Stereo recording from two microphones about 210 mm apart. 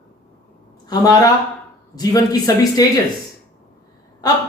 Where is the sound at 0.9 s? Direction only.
15° left (ahead or behind).